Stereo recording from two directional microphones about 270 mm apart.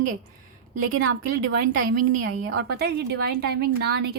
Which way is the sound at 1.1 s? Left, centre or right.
Right.